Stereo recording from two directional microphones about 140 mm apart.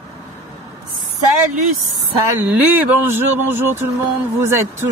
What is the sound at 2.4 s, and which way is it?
Speech, 10° right (ahead or behind).